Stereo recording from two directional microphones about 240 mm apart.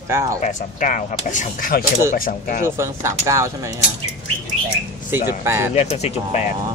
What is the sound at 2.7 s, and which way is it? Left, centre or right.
Speech, centre.